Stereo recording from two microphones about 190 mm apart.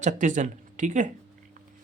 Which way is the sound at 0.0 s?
40° right (ahead or behind).